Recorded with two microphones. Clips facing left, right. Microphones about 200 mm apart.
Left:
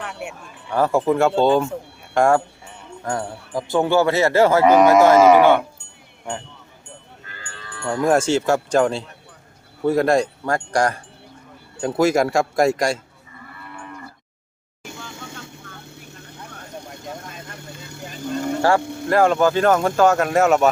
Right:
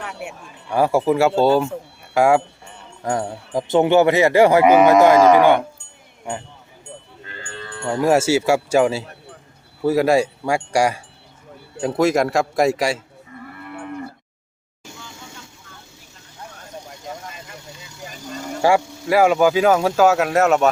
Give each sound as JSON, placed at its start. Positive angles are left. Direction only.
{"t": 0.0, "sound": "speech", "side_deg": 0}
{"t": 7.9, "sound": "speech", "side_deg": -10}
{"t": 11.8, "sound": "speech", "side_deg": 0}
{"t": 14.8, "sound": "vehicle", "side_deg": 60}
{"t": 19.0, "sound": "speech", "side_deg": -10}